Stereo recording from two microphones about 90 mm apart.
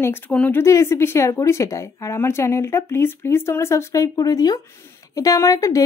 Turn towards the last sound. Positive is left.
turn(degrees=40)  # may be behind; listen again after turning